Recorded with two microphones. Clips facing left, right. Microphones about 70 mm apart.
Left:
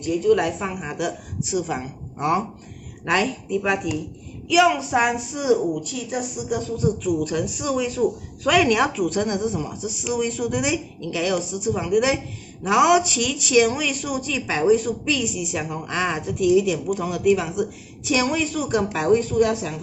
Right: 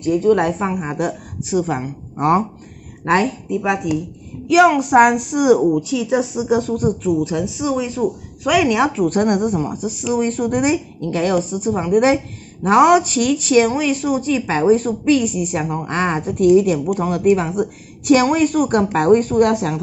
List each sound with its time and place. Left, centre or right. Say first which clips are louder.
0.0 s speech: right 4 dB; right
3.4 s a woman's voice: right 3 dB; centre
4.5 s a woman's voice: right 6 dB; right
7.0 s a woman's voice: right 4 dB; right
9.0 s speech: right 6 dB; right